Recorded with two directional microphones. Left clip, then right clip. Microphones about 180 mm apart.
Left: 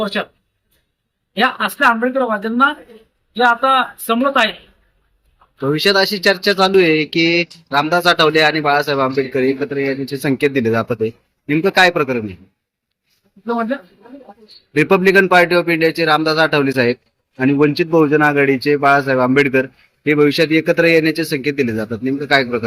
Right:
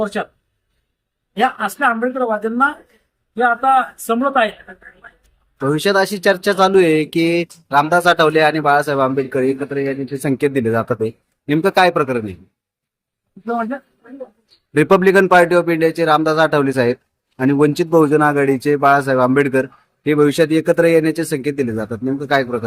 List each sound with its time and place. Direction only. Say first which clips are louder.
0.0 s speech: left 1 dB; 15° right (ahead or behind)
1.4 s speech: left 2 dB; 10° right (ahead or behind)
5.5 s speech: left 1 dB; 5° right (ahead or behind)
13.4 s speech: left 2 dB; 10° right (ahead or behind)
14.8 s speech: even; 5° right (ahead or behind)
18.2 s speech: left 1 dB; centre (ahead or behind)